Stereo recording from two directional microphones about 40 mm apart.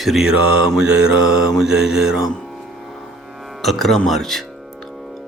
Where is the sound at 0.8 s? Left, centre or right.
Right.